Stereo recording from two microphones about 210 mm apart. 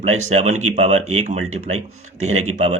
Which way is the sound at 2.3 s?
90° right.